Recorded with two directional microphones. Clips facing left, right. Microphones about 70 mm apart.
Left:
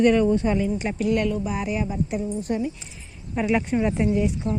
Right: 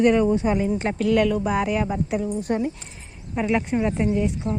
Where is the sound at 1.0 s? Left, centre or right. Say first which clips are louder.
Right 3 dB; right.